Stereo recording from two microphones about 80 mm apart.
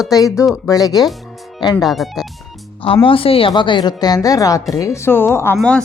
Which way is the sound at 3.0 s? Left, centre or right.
Left.